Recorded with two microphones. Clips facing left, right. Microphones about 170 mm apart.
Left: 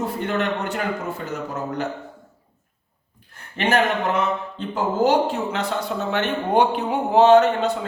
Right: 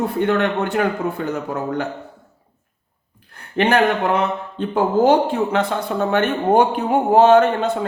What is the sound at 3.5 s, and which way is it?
Speech, 60° right (ahead or behind).